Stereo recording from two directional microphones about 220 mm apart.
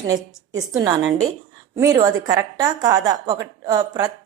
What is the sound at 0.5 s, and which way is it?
A woman's voice, 15° right (ahead or behind).